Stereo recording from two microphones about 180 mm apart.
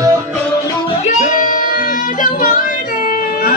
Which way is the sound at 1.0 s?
45° left (ahead or behind).